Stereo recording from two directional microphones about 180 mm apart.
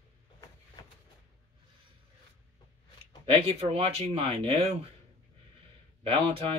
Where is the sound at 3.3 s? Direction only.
35° right (ahead or behind).